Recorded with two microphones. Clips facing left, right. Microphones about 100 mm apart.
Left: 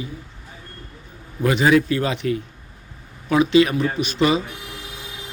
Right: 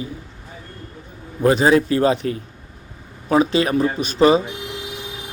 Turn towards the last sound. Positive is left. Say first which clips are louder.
# right 5 dB
turn(degrees=-35)  # may be behind; listen again after turning